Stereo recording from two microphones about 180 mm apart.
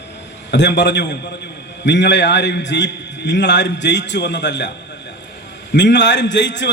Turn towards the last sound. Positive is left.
turn(degrees=80)